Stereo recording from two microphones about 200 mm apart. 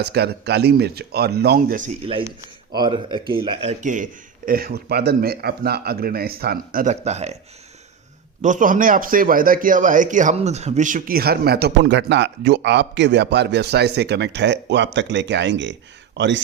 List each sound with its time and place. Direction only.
0.0 s a man's voice: 55° right (ahead or behind)
2.7 s speech: 20° right (ahead or behind)
8.4 s a man's voice: 40° right (ahead or behind); by 16.4 s 60° right (ahead or behind)